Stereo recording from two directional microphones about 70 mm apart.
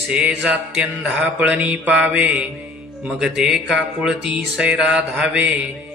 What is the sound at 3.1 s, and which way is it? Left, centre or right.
Music, centre.